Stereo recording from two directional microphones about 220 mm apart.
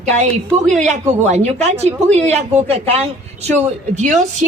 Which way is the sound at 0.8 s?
30° right (ahead or behind).